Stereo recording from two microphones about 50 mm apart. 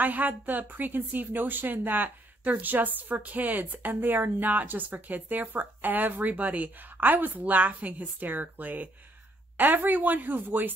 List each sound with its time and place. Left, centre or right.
0.0 s speech: right